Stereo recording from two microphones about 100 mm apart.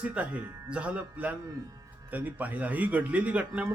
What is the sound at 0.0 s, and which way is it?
Speech, 15° right (ahead or behind).